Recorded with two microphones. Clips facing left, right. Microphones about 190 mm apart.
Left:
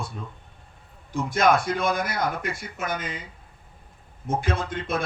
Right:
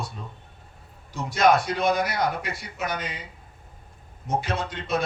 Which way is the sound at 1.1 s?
50° left (ahead or behind).